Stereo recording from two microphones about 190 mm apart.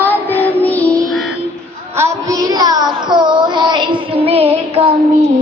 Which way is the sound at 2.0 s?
15° right (ahead or behind).